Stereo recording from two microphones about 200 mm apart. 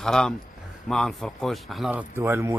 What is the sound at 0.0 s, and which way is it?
Speech, 5° left (ahead or behind).